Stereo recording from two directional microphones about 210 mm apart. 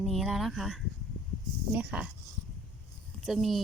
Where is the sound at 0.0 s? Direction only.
Centre (ahead or behind).